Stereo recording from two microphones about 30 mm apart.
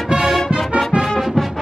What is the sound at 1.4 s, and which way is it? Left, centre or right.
Music, centre.